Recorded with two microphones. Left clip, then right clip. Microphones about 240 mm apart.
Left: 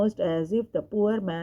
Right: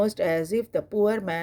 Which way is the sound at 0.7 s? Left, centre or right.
Right.